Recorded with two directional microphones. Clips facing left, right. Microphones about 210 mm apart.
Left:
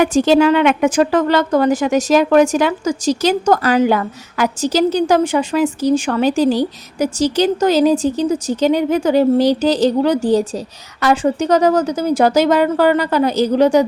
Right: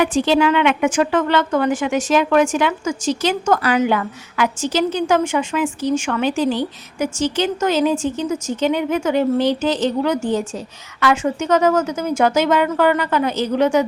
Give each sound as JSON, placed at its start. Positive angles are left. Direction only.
{"t": 0.0, "sound": "a woman's voice", "side_deg": 45}